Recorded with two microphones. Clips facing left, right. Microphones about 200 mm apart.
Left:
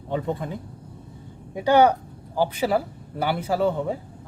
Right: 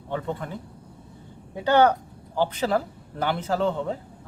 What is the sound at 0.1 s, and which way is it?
Speech, 15° left (ahead or behind).